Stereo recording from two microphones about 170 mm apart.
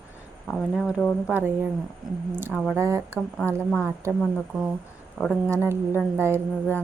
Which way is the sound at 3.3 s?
10° left (ahead or behind).